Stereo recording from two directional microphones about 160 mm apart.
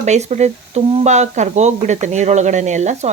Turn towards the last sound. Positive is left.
turn(degrees=-45)  # may be behind; listen again after turning